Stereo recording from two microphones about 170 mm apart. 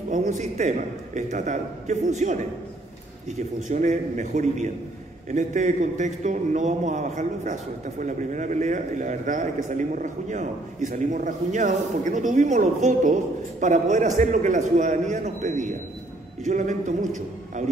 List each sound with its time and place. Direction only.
0.1 s a man's voice: 45° right (ahead or behind)